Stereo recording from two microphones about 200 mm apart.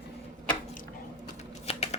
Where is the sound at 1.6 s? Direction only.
30° left (ahead or behind).